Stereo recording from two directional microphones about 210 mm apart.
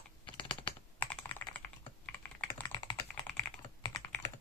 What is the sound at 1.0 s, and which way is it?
Computer keyboard, 10° left (ahead or behind).